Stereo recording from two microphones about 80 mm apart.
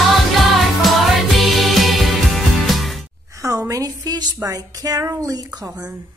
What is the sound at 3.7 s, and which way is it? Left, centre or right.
Speech, right.